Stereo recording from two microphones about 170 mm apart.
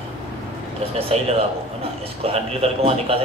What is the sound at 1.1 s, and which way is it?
Speech, 35° right (ahead or behind).